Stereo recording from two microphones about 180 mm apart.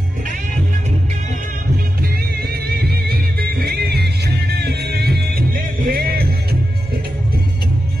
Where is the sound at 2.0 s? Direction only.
60° right (ahead or behind).